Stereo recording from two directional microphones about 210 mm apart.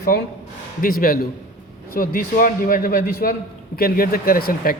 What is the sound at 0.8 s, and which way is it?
A man's voice, 45° left (ahead or behind).